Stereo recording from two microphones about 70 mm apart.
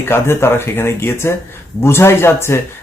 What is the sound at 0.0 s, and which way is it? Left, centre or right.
Speech, left.